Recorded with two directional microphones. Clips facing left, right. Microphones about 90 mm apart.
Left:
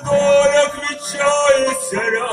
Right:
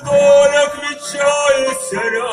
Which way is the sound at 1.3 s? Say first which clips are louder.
Even; 10° left (ahead or behind).